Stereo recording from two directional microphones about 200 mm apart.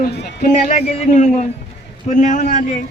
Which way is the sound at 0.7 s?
35° left (ahead or behind).